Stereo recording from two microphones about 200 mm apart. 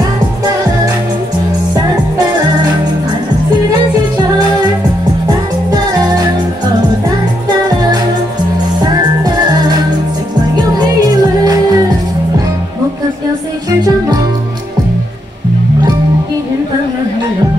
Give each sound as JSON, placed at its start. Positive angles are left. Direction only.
{"t": 5.7, "sound": "music", "side_deg": -20}
{"t": 8.8, "sound": "music", "side_deg": -20}